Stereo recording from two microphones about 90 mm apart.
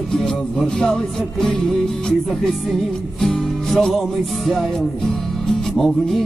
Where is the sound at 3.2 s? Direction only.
5° left (ahead or behind).